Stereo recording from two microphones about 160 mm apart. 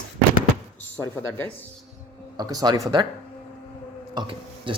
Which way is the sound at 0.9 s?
15° left (ahead or behind).